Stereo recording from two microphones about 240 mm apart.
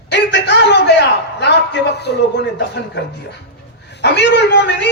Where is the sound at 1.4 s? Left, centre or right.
Left.